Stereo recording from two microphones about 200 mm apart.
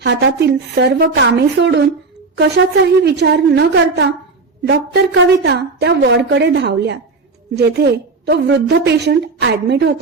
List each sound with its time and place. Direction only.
0.0 s a woman's voice: 55° right (ahead or behind)
3.0 s a woman's voice: 60° right (ahead or behind)